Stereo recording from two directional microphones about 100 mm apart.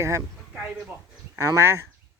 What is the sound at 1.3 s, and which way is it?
Speech, 30° right (ahead or behind).